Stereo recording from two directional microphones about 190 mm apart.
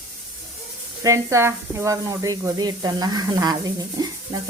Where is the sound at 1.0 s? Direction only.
15° right (ahead or behind).